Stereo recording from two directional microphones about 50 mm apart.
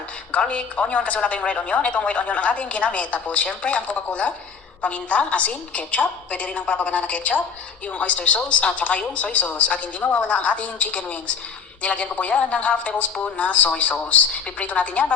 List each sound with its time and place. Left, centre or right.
0.3 s speech: left